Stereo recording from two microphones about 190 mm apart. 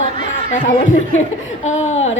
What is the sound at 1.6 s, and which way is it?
Speech, 40° left (ahead or behind).